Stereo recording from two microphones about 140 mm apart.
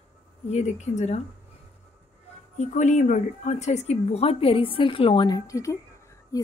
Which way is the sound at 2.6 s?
60° left (ahead or behind).